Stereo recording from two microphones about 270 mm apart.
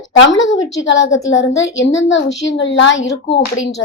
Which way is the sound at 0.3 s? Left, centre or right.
Left.